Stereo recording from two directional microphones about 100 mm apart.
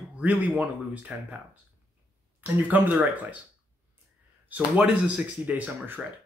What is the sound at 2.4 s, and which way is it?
Speech, 15° right (ahead or behind).